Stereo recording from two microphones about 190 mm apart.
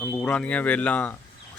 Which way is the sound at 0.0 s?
5° left (ahead or behind).